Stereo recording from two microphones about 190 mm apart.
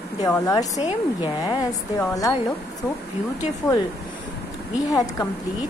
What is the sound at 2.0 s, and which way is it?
Speech, 20° left (ahead or behind).